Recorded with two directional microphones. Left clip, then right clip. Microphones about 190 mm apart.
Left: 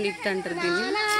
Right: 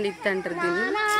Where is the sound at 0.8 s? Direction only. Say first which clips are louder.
Right 3 dB; 10° left (ahead or behind).